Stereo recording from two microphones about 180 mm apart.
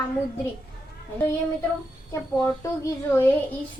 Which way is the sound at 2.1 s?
15° left (ahead or behind).